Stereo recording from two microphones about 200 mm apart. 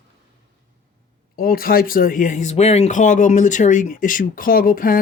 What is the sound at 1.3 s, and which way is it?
Speech, 45° left (ahead or behind).